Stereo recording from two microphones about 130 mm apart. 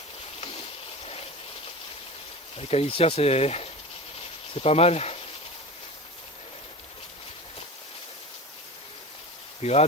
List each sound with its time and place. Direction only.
2.6 s speech: 50° left (ahead or behind)
4.2 s a sound: 50° left (ahead or behind)
9.6 s speech: 55° left (ahead or behind)